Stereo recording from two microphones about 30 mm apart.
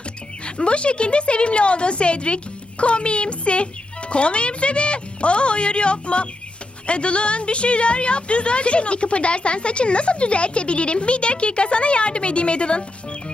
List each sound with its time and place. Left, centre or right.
0.4 s a woman's voice: left